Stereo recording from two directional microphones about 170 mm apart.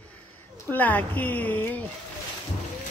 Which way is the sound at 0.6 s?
10° left (ahead or behind).